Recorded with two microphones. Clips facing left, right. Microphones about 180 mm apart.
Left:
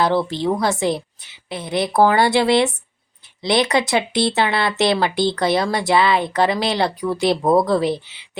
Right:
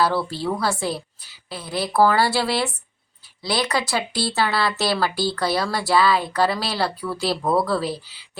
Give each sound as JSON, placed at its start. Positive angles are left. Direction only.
{"t": 0.0, "sound": "speech", "side_deg": 20}